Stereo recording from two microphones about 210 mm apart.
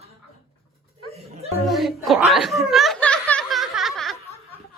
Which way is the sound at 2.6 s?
Centre (ahead or behind).